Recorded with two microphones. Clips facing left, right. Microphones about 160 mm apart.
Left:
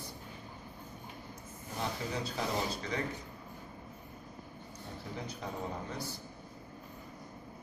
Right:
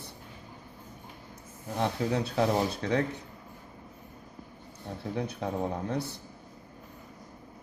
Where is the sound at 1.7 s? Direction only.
65° right (ahead or behind).